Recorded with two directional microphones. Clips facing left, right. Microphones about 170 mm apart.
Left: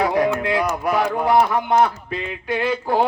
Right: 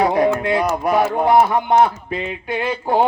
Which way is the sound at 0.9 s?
25° right (ahead or behind).